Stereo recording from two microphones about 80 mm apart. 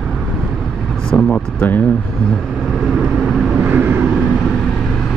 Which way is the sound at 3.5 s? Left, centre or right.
Right.